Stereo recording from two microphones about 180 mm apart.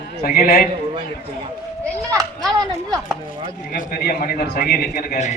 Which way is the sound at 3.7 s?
55° left (ahead or behind).